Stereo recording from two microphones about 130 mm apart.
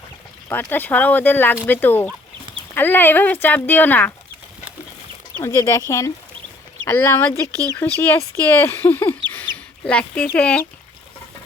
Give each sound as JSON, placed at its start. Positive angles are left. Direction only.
{"t": 0.4, "sound": "speech", "side_deg": 15}
{"t": 5.4, "sound": "speech", "side_deg": 25}
{"t": 6.8, "sound": "speech", "side_deg": 20}
{"t": 9.0, "sound": "bird", "side_deg": 15}